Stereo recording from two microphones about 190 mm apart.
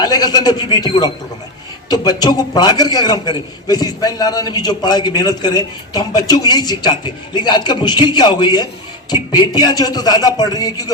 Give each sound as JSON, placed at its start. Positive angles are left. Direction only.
{"t": 0.0, "sound": "a man's voice", "side_deg": 20}